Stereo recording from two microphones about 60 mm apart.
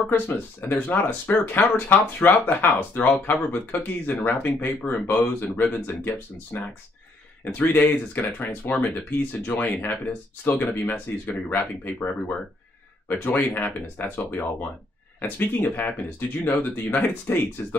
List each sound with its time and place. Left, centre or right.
0.1 s speech: left
13.1 s speech: left